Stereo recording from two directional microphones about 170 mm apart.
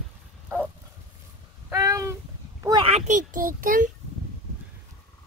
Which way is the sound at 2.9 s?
40° right (ahead or behind).